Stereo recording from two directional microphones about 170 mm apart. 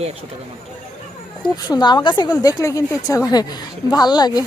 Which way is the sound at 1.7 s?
25° left (ahead or behind).